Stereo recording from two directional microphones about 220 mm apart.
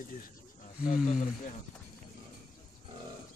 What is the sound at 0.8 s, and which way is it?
Speech, 35° left (ahead or behind).